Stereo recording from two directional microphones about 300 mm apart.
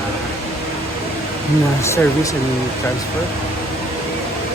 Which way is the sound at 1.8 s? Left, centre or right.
Centre.